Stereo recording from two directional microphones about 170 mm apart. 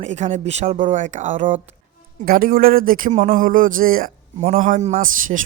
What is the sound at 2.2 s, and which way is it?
A woman's voice, 55° right (ahead or behind).